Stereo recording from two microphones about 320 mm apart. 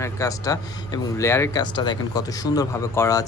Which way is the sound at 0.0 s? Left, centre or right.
Centre.